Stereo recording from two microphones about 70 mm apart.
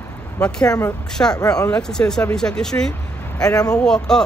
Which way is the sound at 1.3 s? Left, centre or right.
Left.